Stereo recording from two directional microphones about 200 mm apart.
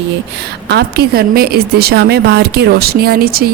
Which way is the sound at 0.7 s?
55° right (ahead or behind).